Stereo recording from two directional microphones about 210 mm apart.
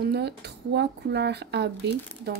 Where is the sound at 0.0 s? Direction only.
50° right (ahead or behind).